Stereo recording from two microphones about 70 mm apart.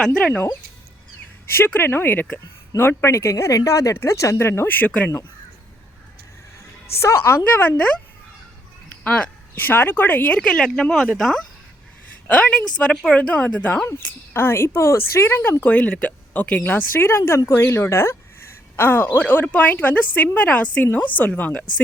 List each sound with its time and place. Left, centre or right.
0.2 s a woman's voice: left
1.5 s a woman's voice: left
7.0 s a woman's voice: left
9.0 s speech: centre
9.6 s speech: left; by 11.4 s centre
12.3 s a woman's voice: centre; by 15.4 s left
15.6 s a woman's voice: left